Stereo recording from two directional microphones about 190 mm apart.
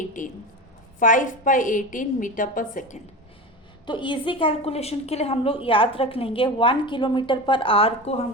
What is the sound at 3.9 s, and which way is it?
A woman's voice, 25° left (ahead or behind).